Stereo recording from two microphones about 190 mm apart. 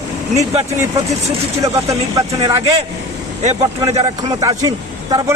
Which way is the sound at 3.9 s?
35° right (ahead or behind).